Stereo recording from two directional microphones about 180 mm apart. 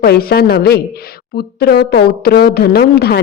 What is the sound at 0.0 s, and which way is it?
Speech, 55° left (ahead or behind).